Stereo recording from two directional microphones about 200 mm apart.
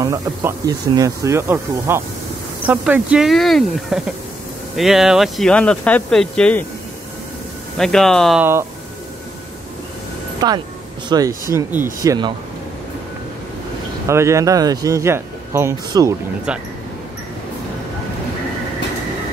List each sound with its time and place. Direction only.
0.0 s speech: 15° right (ahead or behind); by 6.6 s 5° left (ahead or behind)
7.7 s speech: 5° left (ahead or behind)
10.4 s speech: 20° right (ahead or behind)
14.0 s speech: 15° right (ahead or behind)
16.5 s speech: 5° right (ahead or behind)